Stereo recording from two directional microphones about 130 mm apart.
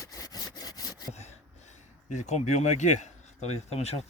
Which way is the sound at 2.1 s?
60° left (ahead or behind).